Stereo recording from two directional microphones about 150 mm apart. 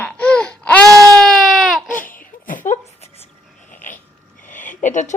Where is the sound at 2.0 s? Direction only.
65° left (ahead or behind).